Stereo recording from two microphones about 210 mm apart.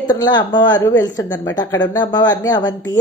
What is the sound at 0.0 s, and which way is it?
A woman's voice, 20° left (ahead or behind).